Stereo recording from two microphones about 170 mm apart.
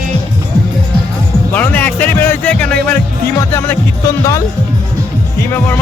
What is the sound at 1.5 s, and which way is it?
Music, 10° left (ahead or behind).